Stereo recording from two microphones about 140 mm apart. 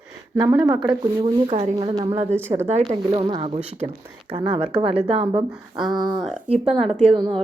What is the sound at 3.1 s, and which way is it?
Speech, 40° right (ahead or behind).